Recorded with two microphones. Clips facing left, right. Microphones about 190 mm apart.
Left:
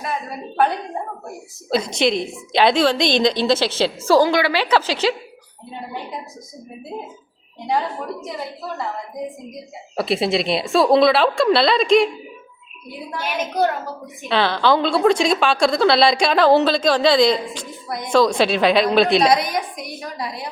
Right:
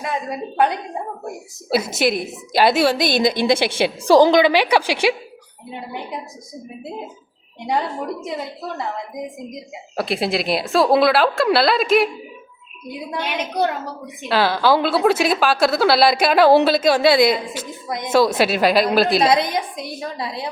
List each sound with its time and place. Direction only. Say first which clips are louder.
0.0 s a woman's voice: right 2 dB; 20° right (ahead or behind)
1.7 s a woman's voice: even; 5° right (ahead or behind)
9.9 s a woman's voice: left 2 dB; centre (ahead or behind)
13.1 s a woman's voice: even; 20° right (ahead or behind)
14.3 s a woman's voice: right 1 dB; 5° right (ahead or behind)
17.8 s a woman's voice: right 1 dB; 20° right (ahead or behind)
18.1 s a woman's voice: even; 5° right (ahead or behind)
19.3 s a woman's voice: even; 25° right (ahead or behind)